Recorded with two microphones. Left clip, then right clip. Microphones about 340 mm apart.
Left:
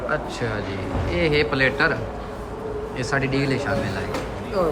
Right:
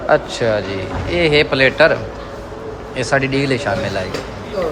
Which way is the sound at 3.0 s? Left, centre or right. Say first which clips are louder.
Right 7 dB; centre.